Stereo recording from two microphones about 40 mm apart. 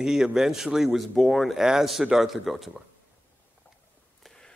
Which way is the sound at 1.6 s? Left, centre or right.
Centre.